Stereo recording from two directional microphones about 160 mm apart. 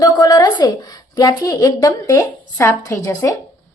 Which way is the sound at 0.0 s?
25° left (ahead or behind).